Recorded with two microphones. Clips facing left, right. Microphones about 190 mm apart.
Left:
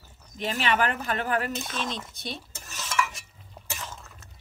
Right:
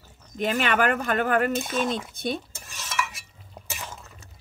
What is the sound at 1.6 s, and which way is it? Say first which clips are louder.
Cutlery: right 7 dB; 5° right (ahead or behind).